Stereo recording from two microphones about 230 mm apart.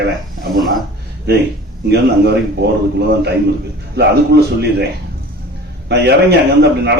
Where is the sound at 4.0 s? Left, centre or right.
Right.